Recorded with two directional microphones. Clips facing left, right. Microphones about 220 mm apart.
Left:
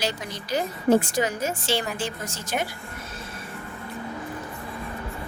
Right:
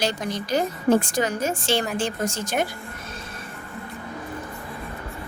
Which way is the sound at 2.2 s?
50° right (ahead or behind).